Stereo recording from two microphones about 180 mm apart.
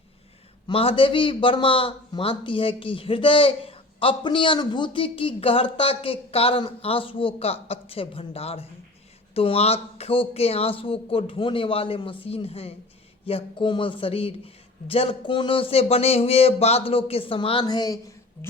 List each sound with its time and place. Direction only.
0.7 s a man's voice: 30° left (ahead or behind)